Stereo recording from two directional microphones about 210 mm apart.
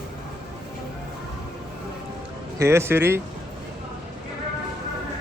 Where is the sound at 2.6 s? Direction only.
10° right (ahead or behind).